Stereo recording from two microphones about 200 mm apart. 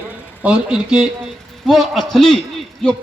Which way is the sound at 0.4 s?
5° right (ahead or behind).